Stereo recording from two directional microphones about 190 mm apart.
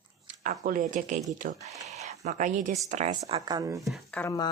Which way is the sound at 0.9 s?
40° right (ahead or behind).